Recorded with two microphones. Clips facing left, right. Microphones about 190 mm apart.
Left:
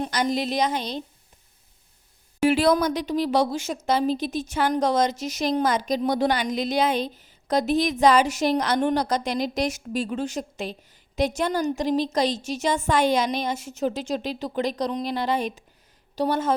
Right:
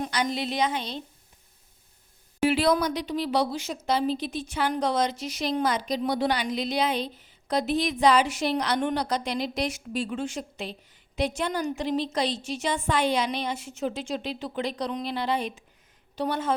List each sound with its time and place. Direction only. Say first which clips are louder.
0.1 s a woman's voice: left 4 dB; 40° left (ahead or behind)
2.5 s a woman's voice: left 4 dB; 45° left (ahead or behind)